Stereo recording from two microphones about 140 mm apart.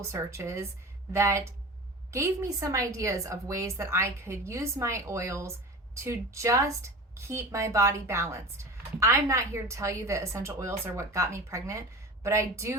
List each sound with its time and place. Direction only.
0.0 s a woman's voice: 20° right (ahead or behind)